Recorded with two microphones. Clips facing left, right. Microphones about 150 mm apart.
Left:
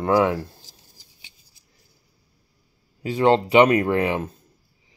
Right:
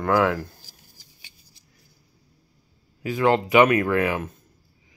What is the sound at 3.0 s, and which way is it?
Speech, 30° left (ahead or behind).